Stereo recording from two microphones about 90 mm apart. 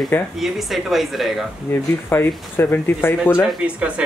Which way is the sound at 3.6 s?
15° right (ahead or behind).